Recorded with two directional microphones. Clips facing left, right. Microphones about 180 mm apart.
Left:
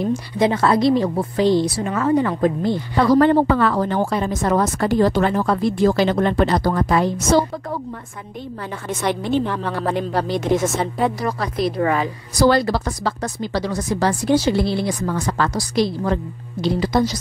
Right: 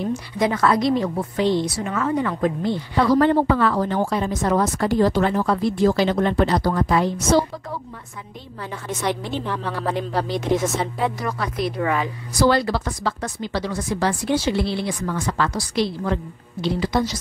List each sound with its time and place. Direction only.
0.0 s a woman's voice: 30° left (ahead or behind)
8.8 s a woman's voice: 55° left (ahead or behind); by 17.2 s 40° left (ahead or behind)